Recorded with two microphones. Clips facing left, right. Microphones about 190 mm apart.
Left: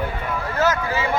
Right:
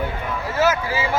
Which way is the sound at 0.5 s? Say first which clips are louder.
Right 2 dB; 10° right (ahead or behind).